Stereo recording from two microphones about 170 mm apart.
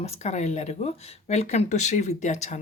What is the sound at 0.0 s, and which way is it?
Speech, 40° left (ahead or behind).